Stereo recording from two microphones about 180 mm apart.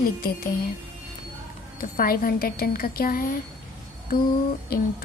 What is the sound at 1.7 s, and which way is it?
A woman's voice, 55° left (ahead or behind).